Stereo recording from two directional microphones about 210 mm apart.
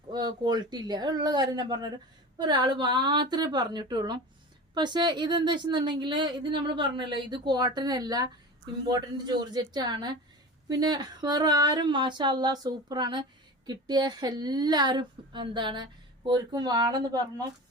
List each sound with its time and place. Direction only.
0.1 s a woman's voice: 20° right (ahead or behind)